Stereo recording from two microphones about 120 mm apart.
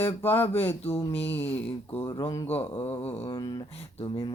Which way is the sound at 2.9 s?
50° left (ahead or behind).